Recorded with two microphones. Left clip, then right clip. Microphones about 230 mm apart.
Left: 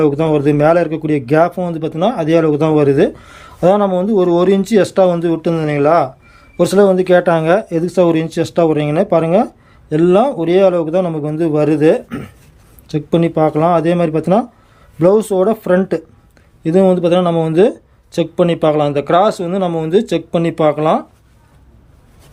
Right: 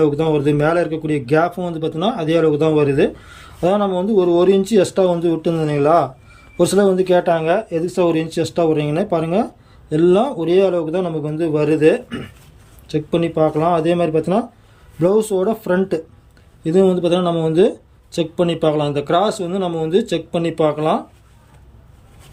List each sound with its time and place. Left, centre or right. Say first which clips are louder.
0.0 s speech: left 3 dB; centre